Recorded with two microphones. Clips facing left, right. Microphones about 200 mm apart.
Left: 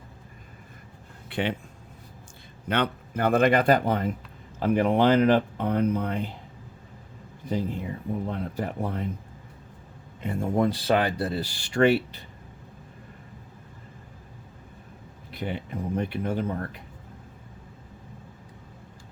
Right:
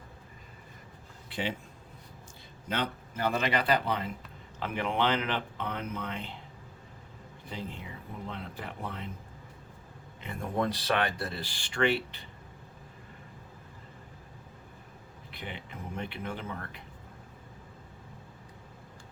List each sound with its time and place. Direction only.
1.3 s a man's voice: 60° left (ahead or behind)
2.6 s speech: 60° left (ahead or behind); by 6.3 s 40° left (ahead or behind)
7.4 s speech: 40° left (ahead or behind)
10.7 s speech: 30° left (ahead or behind)
15.3 s speech: 40° left (ahead or behind)